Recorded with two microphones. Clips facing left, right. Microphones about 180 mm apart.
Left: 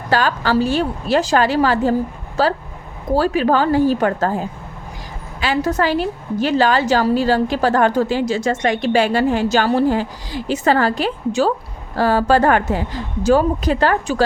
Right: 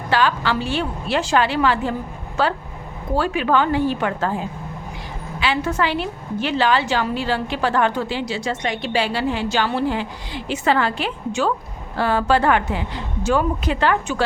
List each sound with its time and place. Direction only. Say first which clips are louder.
0.1 s a woman's voice: left 3 dB; 40° left (ahead or behind)